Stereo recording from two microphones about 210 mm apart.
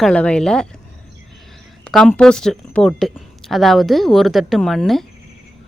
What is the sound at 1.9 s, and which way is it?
Speech, 5° left (ahead or behind).